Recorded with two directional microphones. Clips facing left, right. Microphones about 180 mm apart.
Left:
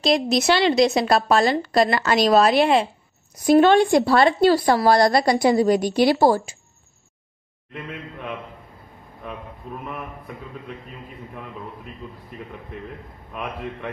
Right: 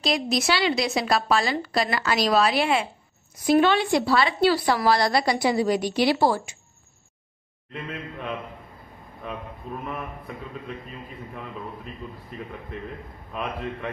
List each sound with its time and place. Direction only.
0.4 s a woman's voice: 40° left (ahead or behind)
7.7 s a man's voice: 5° left (ahead or behind)
13.3 s a man's voice: 5° left (ahead or behind)